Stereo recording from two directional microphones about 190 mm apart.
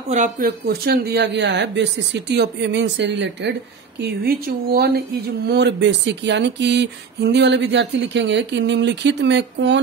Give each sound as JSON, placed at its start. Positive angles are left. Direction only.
{"t": 0.1, "sound": "speech", "side_deg": -45}
{"t": 4.0, "sound": "speech", "side_deg": -55}
{"t": 5.5, "sound": "speech", "side_deg": -65}